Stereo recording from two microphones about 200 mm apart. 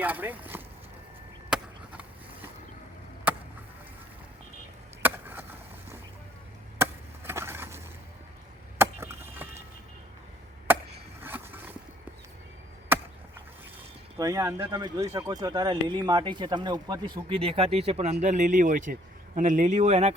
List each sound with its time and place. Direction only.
0.0 s speech: 10° right (ahead or behind)
1.5 s skateboard: 5° right (ahead or behind)
3.3 s chop: 10° right (ahead or behind)
5.0 s chop: 10° right (ahead or behind)
7.3 s a sound: 10° right (ahead or behind)
8.8 s a sound: 10° right (ahead or behind)
10.7 s chopping: 10° right (ahead or behind)
11.2 s a sound: 10° right (ahead or behind)
12.9 s chop: 10° right (ahead or behind)
14.2 s speech: 15° right (ahead or behind); by 20.1 s 35° right (ahead or behind)